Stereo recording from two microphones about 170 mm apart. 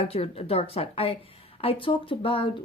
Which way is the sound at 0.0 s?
35° left (ahead or behind).